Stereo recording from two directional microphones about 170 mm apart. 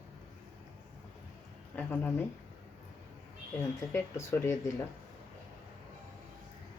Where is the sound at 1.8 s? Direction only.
10° left (ahead or behind).